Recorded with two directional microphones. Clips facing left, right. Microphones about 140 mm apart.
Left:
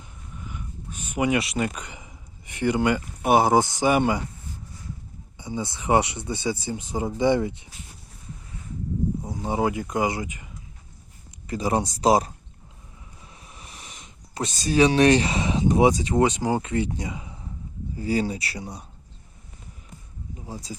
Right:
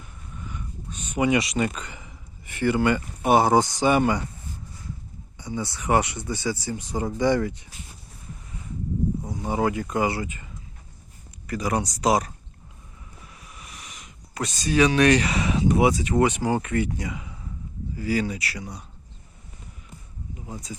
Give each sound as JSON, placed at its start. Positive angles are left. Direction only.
{"t": 0.4, "sound": "a sound", "side_deg": 10}
{"t": 1.7, "sound": "speech", "side_deg": 15}
{"t": 5.4, "sound": "speech", "side_deg": 20}
{"t": 9.2, "sound": "speech", "side_deg": 20}
{"t": 11.4, "sound": "speech", "side_deg": 25}
{"t": 13.3, "sound": "a sound", "side_deg": 30}
{"t": 16.0, "sound": "speech", "side_deg": 20}
{"t": 20.3, "sound": "speech", "side_deg": 35}